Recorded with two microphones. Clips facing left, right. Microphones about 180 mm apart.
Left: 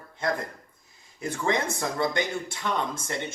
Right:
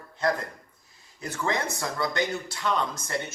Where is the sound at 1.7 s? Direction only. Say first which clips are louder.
Left 2 dB; 20° left (ahead or behind).